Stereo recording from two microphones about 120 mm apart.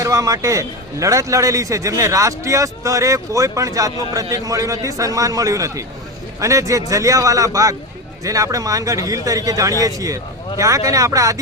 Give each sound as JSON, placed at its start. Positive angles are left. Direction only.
{"t": 0.0, "sound": "a man's voice", "side_deg": -25}